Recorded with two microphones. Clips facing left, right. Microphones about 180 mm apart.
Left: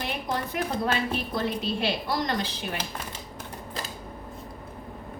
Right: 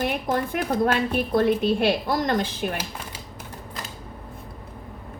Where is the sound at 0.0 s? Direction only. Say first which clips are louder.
Right 6 dB; 50° right (ahead or behind).